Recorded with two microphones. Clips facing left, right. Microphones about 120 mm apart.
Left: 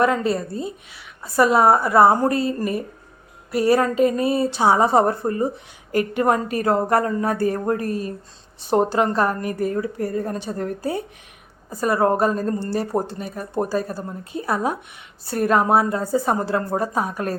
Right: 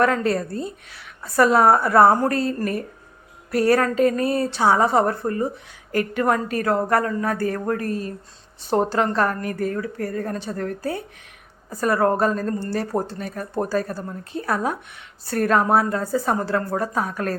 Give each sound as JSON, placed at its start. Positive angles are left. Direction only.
{"t": 0.0, "sound": "a woman's voice", "side_deg": 10}